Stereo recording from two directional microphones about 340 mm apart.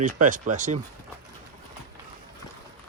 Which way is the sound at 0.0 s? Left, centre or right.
Right.